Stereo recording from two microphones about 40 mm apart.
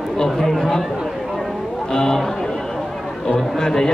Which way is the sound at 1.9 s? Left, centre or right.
Centre.